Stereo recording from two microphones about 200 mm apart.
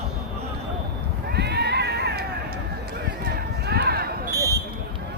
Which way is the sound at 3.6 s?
55° right (ahead or behind).